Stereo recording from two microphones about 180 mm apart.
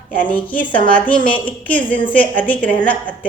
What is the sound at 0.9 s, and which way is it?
A woman's voice, 10° left (ahead or behind).